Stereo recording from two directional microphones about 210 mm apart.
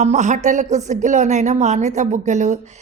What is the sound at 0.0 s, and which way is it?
Speech, 35° right (ahead or behind).